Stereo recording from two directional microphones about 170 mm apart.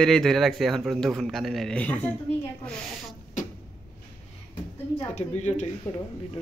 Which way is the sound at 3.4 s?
50° left (ahead or behind).